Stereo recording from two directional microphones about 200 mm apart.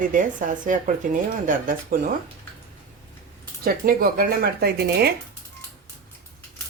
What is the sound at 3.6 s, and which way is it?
Speech, 45° right (ahead or behind).